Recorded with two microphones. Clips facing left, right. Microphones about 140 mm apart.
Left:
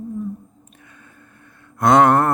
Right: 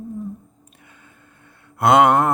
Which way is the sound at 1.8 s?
25° right (ahead or behind).